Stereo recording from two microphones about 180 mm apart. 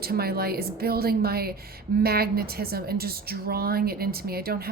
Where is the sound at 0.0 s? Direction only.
60° right (ahead or behind).